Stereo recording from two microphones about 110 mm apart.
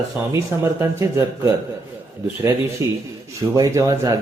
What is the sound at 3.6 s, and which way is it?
Speech, 30° right (ahead or behind).